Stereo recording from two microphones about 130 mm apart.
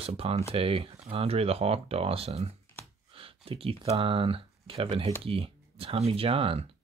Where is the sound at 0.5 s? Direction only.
45° right (ahead or behind).